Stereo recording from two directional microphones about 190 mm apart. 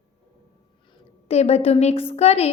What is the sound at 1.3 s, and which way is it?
A woman's voice, 35° left (ahead or behind).